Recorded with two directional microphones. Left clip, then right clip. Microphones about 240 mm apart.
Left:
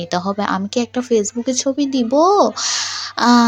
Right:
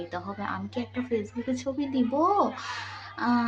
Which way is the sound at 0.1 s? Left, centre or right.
Left.